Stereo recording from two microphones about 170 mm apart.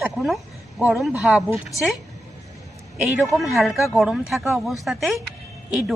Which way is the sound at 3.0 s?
5° right (ahead or behind).